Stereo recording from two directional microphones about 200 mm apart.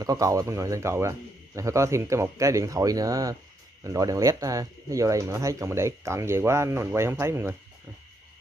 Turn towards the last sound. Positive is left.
turn(degrees=-15)  # may be behind; listen again after turning